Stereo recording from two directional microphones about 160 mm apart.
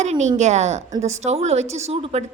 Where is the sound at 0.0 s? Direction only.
45° right (ahead or behind).